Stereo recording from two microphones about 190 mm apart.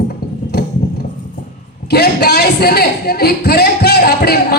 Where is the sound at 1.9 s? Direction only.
60° left (ahead or behind).